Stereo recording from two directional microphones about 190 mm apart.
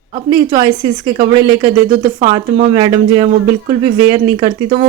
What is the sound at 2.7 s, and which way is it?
Speech, 25° right (ahead or behind).